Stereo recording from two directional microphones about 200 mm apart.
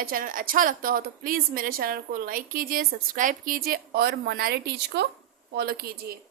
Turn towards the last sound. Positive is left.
turn(degrees=-50)  # may be behind; listen again after turning